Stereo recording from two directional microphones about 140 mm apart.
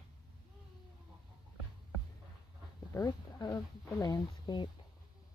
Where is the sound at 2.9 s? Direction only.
25° left (ahead or behind).